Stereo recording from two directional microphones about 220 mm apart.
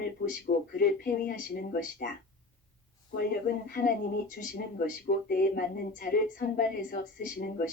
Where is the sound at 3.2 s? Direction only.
40° left (ahead or behind).